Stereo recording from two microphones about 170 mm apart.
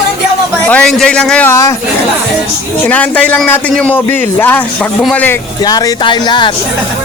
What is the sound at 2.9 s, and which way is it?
Speech, 10° left (ahead or behind).